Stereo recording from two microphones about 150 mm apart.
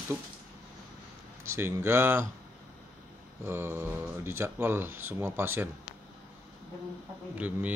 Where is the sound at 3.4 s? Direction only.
15° right (ahead or behind).